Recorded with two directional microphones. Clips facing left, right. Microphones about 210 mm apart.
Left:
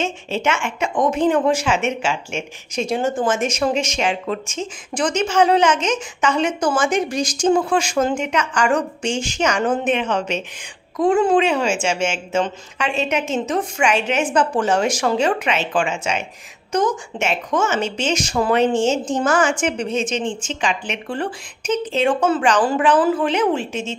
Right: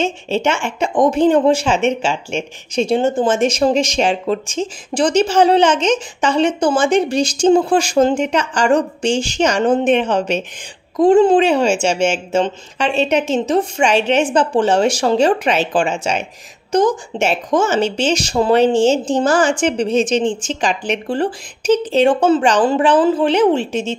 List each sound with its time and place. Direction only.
0.0 s speech: 35° right (ahead or behind)